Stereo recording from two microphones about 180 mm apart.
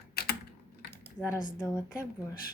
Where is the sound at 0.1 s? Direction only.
55° left (ahead or behind).